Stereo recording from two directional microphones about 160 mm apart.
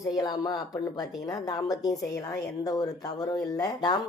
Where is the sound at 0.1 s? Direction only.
25° left (ahead or behind).